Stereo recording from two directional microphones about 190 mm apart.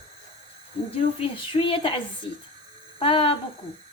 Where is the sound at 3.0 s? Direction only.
30° left (ahead or behind).